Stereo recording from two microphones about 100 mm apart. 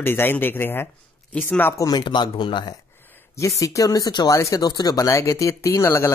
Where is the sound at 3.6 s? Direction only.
35° left (ahead or behind).